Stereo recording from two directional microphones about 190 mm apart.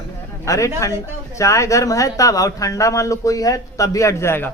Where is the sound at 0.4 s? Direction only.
15° left (ahead or behind).